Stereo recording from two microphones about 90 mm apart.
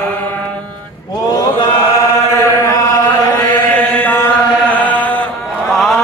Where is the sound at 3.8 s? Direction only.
15° left (ahead or behind).